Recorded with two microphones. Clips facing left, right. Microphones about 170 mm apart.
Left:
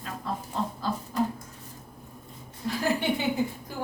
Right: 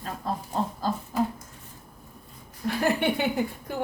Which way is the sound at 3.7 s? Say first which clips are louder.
Right 4 dB; 60° right (ahead or behind).